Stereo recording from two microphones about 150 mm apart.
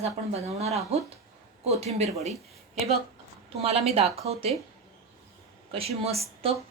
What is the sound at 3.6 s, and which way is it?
Speech, 45° right (ahead or behind).